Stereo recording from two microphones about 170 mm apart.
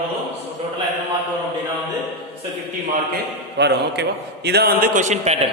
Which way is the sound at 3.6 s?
85° right.